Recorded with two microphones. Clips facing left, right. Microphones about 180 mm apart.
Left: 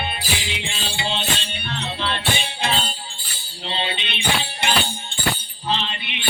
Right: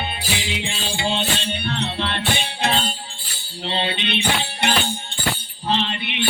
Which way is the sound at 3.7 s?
60° right (ahead or behind).